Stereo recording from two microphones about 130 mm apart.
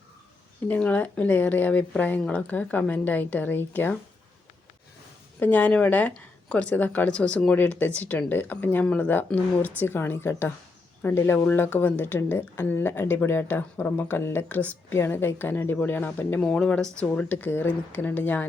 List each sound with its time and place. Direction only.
0.7 s a woman's voice: 10° left (ahead or behind)
5.4 s a woman's voice: 10° left (ahead or behind)